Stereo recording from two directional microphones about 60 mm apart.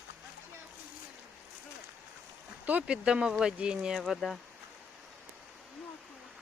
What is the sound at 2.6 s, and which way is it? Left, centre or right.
Speech, right.